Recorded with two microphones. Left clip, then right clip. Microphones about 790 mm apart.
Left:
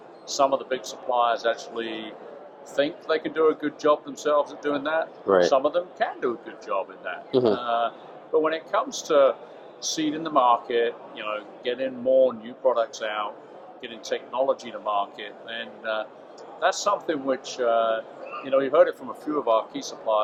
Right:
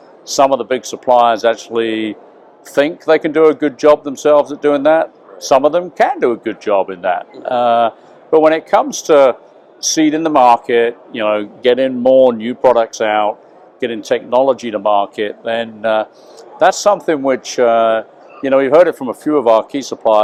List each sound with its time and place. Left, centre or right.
0.3 s speech: right